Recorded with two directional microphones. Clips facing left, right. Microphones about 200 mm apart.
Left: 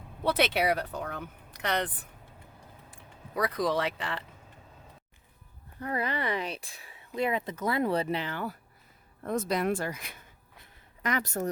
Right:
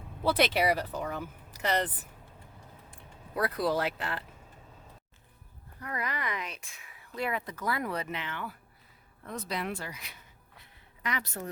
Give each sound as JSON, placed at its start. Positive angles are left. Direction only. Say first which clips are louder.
{"t": 0.3, "sound": "speech", "louder": "even", "side_deg": 0}
{"t": 2.9, "sound": "speech", "louder": "left 1 dB", "side_deg": -5}
{"t": 5.8, "sound": "speech", "louder": "left 5 dB", "side_deg": 30}